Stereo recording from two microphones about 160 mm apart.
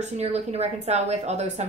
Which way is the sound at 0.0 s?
40° right (ahead or behind).